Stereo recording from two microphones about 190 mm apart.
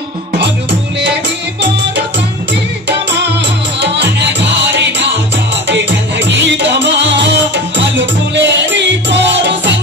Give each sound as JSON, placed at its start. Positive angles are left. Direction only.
{"t": 3.8, "sound": "music", "side_deg": -65}